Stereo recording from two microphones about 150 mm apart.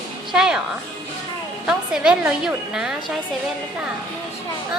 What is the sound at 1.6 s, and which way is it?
A woman's voice, 5° right (ahead or behind).